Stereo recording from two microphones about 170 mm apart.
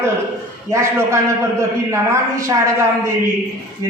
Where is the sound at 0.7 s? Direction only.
15° right (ahead or behind).